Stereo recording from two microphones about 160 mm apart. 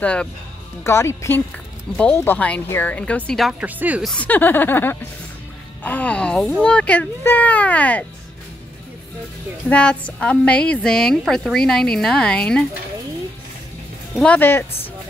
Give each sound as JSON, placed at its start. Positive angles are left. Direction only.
{"t": 0.0, "sound": "a child's voice", "side_deg": 5}
{"t": 3.6, "sound": "speech", "side_deg": -10}
{"t": 4.0, "sound": "a child's voice", "side_deg": 5}
{"t": 9.7, "sound": "a woman's voice", "side_deg": 5}
{"t": 14.2, "sound": "a child's voice", "side_deg": 10}